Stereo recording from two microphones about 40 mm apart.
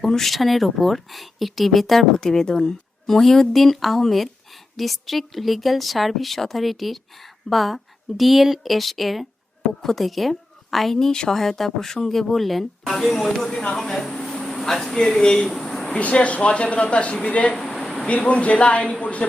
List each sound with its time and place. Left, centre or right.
0.0 s a woman's voice: centre
10.9 s speech: centre
11.3 s speech: centre
13.7 s a sound: centre
14.5 s speech: centre
15.4 s a sound: centre
15.9 s speech: left